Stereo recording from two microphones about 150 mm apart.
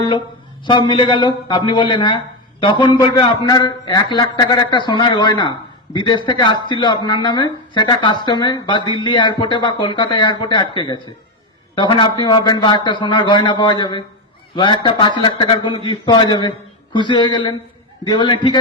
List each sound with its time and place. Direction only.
0.6 s a man's voice: 30° left (ahead or behind)